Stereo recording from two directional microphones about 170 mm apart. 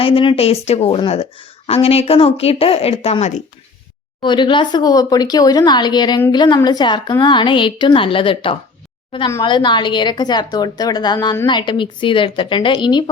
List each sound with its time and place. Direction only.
0.0 s a woman's voice: 30° left (ahead or behind)
4.2 s a woman's voice: 25° left (ahead or behind)